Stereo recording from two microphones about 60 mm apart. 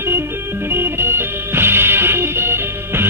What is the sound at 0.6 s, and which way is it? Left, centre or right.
Music, right.